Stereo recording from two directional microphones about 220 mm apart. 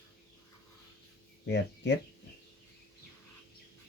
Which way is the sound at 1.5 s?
55° left (ahead or behind).